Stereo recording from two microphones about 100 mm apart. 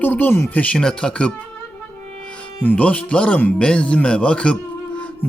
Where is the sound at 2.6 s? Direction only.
15° left (ahead or behind).